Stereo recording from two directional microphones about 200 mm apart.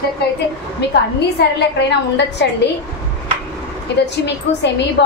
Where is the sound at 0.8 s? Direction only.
55° left (ahead or behind).